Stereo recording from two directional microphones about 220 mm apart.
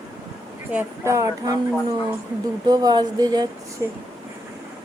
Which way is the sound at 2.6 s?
20° right (ahead or behind).